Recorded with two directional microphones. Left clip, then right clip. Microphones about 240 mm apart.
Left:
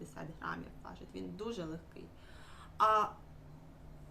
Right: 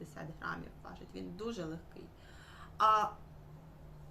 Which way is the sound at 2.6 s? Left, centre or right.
Centre.